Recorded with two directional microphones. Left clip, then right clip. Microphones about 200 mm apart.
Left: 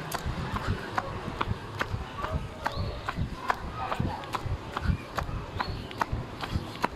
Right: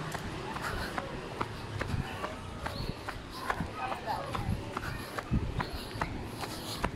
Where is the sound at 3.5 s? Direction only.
35° left (ahead or behind).